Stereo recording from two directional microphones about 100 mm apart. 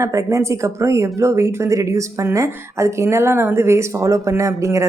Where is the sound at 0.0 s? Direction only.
30° right (ahead or behind).